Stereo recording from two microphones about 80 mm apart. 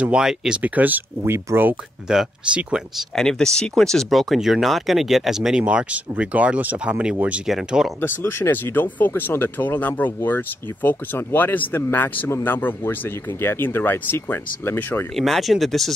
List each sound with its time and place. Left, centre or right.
0.0 s speech: centre
0.6 s speech: right
2.0 s speech: centre
3.2 s speech: centre
7.4 s speech: centre
8.0 s speech: left
15.1 s speech: centre